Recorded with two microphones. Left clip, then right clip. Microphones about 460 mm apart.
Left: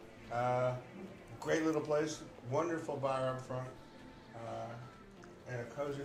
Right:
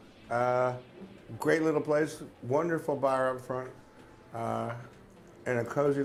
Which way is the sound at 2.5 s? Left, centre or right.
Right.